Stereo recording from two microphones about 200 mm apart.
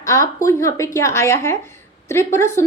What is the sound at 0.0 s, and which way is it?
A woman's voice, 15° left (ahead or behind).